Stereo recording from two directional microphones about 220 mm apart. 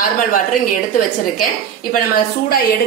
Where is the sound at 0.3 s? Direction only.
40° left (ahead or behind).